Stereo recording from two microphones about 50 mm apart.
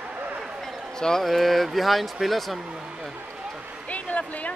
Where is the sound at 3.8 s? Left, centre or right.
Left.